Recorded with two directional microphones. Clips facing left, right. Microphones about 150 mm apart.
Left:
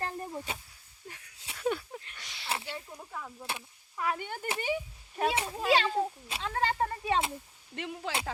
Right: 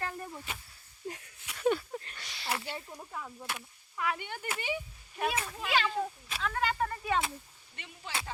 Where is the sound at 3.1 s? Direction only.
5° right (ahead or behind).